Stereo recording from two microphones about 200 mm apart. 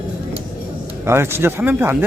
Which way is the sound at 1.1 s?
10° right (ahead or behind).